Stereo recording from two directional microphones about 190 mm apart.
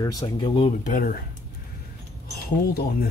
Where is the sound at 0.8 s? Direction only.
45° left (ahead or behind).